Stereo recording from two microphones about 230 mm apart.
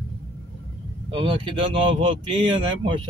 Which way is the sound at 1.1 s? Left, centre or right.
Right.